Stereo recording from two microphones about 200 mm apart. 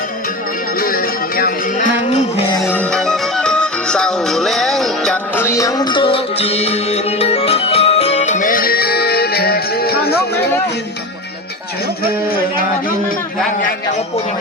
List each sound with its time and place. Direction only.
0.8 s music: 45° left (ahead or behind)
2.6 s music: 5° left (ahead or behind); by 10.2 s 50° left (ahead or behind)